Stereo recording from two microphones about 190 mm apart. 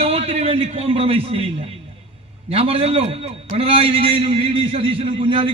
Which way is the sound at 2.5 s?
30° right (ahead or behind).